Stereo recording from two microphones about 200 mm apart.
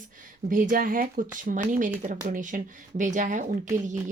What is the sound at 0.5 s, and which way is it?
Speech, 45° right (ahead or behind).